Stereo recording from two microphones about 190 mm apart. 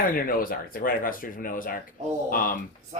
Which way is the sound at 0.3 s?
50° left (ahead or behind).